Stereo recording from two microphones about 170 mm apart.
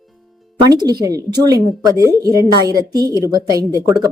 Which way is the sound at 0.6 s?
25° right (ahead or behind).